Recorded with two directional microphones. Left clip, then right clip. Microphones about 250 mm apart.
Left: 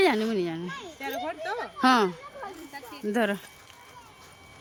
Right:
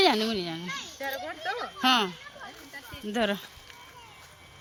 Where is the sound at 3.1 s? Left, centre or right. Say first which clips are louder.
Left 1 dB; centre.